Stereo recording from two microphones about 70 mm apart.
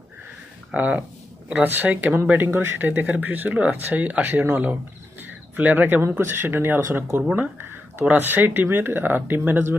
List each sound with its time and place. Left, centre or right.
0.7 s speech: right
2.5 s speech: right